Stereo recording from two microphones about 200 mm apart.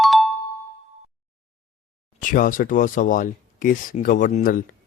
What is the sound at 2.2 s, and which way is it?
A man's voice, 40° left (ahead or behind).